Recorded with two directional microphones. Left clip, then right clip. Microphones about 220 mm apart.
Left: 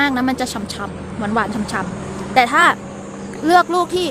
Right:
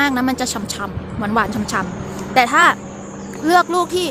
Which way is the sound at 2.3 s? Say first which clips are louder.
Even; centre (ahead or behind).